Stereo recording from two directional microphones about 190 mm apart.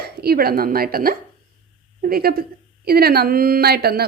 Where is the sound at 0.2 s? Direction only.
55° right (ahead or behind).